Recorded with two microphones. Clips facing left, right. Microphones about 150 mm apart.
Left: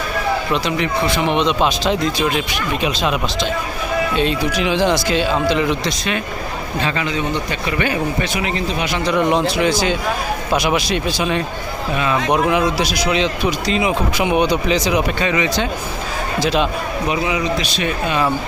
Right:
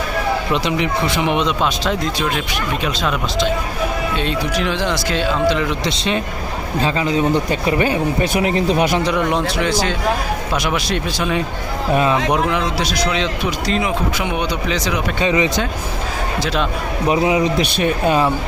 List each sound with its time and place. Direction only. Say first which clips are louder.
0.5 s speech: even; 20° right (ahead or behind); by 1.9 s centre (ahead or behind)
2.8 s speech: left 3 dB; 10° left (ahead or behind)
4.2 s speech: left 2 dB; 5° left (ahead or behind)
6.7 s a man's voice: right 4 dB; 35° right (ahead or behind)
8.3 s a man's voice: right 5 dB; 50° right (ahead or behind)
9.4 s speech: left 2 dB; 10° left (ahead or behind)
12.5 s speech: left 3 dB; 10° left (ahead or behind)
13.8 s speech: left 2 dB; 10° left (ahead or behind)
15.2 s speech: right 2 dB; 25° right (ahead or behind)
16.4 s speech: left 4 dB; 10° left (ahead or behind)
17.1 s a man's voice: right 5 dB; 45° right (ahead or behind)